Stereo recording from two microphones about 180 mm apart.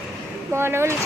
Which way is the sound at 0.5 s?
15° right (ahead or behind).